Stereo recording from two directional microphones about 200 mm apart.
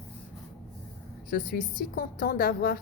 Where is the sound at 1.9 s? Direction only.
45° left (ahead or behind).